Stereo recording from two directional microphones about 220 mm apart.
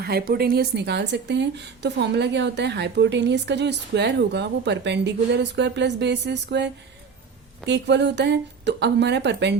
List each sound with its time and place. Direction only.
0.0 s a woman's voice: 45° right (ahead or behind)